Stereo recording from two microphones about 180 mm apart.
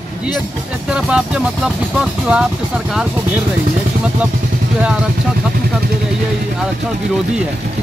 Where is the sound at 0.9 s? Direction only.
5° right (ahead or behind).